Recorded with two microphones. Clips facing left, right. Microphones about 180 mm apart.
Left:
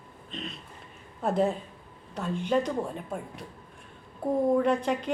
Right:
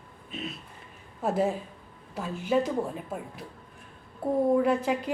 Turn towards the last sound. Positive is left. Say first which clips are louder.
# even
turn(degrees=-5)  # may be behind; listen again after turning